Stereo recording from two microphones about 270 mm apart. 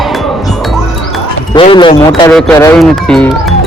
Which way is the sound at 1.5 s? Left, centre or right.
Centre.